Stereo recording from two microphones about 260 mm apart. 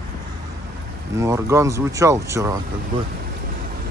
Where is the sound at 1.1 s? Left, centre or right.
Centre.